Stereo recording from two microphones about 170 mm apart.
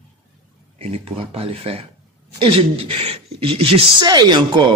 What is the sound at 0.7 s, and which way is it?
A man's voice, 35° right (ahead or behind).